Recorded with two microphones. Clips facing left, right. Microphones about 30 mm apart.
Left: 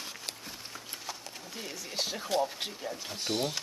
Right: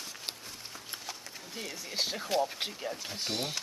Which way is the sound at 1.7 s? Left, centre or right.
Centre.